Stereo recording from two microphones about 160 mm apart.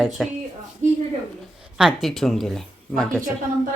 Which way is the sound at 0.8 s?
45° right (ahead or behind).